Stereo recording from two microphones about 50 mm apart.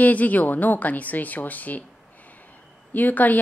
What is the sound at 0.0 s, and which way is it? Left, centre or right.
Speech, left.